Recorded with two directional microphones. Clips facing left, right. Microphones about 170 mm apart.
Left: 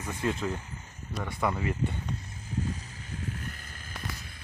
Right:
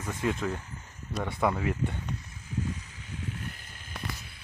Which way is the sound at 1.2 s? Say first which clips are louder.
Right 2 dB; 15° right (ahead or behind).